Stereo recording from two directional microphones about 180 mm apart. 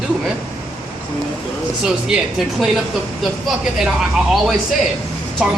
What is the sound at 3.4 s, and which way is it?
Speech, centre (ahead or behind).